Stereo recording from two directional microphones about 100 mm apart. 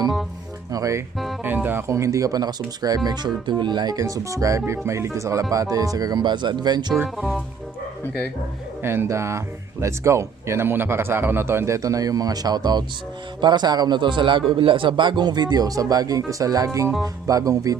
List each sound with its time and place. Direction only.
0.7 s speech: 35° right (ahead or behind)
1.5 s speech: 20° right (ahead or behind); by 6.9 s 45° right (ahead or behind)
7.2 s speech: 5° left (ahead or behind)
8.8 s a man's voice: 25° right (ahead or behind)